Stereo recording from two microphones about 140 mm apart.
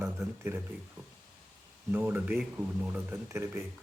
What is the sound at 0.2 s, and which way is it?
Speech, 15° right (ahead or behind).